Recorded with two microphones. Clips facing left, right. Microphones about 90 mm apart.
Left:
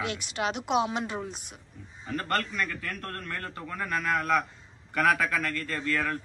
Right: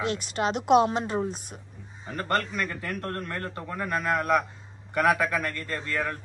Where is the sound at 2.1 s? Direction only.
25° right (ahead or behind).